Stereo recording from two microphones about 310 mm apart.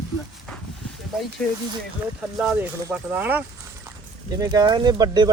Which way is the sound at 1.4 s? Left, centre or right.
Centre.